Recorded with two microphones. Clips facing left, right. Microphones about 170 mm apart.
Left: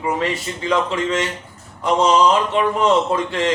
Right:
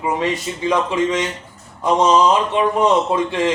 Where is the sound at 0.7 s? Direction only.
20° right (ahead or behind).